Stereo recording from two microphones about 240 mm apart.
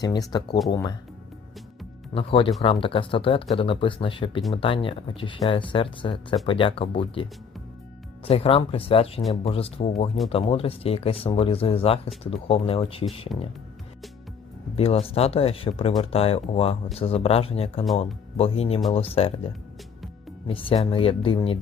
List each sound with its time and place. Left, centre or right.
0.0 s speech: centre
2.1 s speech: left
14.8 s speech: left
20.5 s speech: left